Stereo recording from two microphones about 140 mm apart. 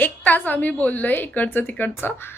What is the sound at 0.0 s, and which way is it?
Speech, 10° left (ahead or behind).